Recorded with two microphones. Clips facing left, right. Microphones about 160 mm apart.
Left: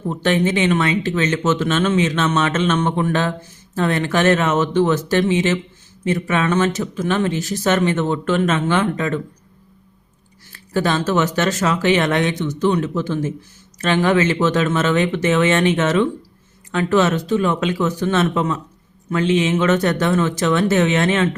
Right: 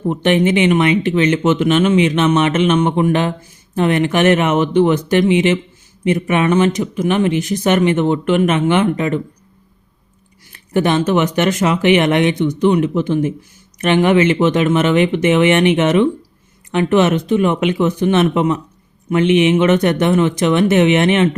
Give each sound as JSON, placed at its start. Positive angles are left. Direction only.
{"t": 0.1, "sound": "speech", "side_deg": -15}
{"t": 10.5, "sound": "speech", "side_deg": -20}